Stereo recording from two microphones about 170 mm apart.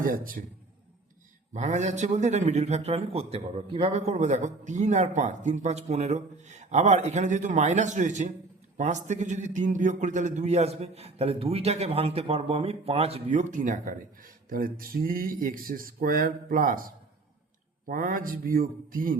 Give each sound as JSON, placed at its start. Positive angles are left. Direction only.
{"t": 0.0, "sound": "speech", "side_deg": -55}
{"t": 1.5, "sound": "a man's voice", "side_deg": -45}